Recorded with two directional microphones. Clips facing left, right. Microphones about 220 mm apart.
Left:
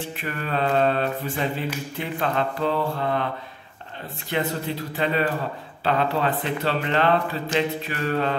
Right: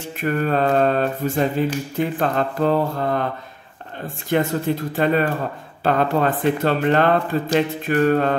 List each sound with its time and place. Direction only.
0.0 s mantra: 45° right (ahead or behind)
4.3 s mantra: 45° right (ahead or behind)